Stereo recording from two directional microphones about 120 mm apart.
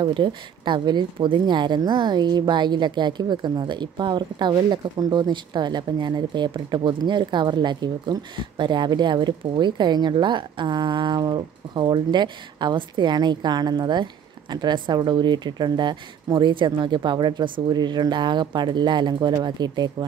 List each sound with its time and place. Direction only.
0.0 s speech: 40° right (ahead or behind)